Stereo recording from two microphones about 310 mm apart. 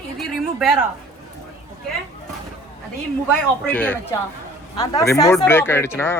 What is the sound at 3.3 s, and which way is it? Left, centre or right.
A woman's voice, centre.